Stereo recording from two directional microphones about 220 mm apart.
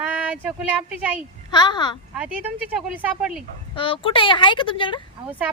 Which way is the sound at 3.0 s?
5° right (ahead or behind).